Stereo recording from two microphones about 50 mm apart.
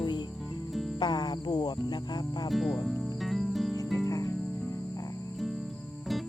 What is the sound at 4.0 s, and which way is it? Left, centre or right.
Cricket, left.